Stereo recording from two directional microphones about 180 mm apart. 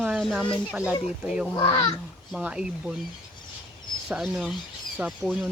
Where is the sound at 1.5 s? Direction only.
25° left (ahead or behind).